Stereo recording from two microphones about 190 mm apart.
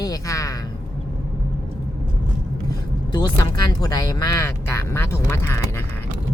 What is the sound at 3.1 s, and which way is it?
Speech, 20° left (ahead or behind).